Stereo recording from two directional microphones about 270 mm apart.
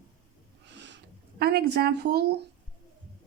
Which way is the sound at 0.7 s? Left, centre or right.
Right.